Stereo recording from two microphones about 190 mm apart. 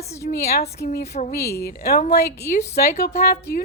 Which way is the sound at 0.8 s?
55° left (ahead or behind).